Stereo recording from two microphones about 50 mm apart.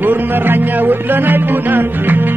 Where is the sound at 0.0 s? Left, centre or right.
Right.